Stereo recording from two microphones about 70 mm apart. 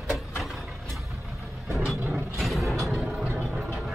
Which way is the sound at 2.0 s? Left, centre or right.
Right.